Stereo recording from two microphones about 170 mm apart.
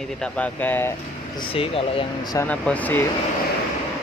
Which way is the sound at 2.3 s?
10° left (ahead or behind).